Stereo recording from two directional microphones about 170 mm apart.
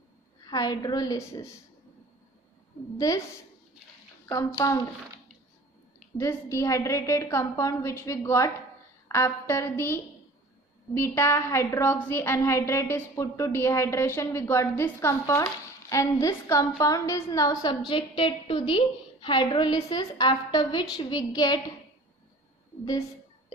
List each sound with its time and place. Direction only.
0.5 s a woman's voice: 25° left (ahead or behind)
3.1 s a woman's voice: 20° left (ahead or behind)
4.6 s a woman's voice: 20° left (ahead or behind)
6.1 s a woman's voice: 15° left (ahead or behind)
11.0 s a woman's voice: 15° left (ahead or behind)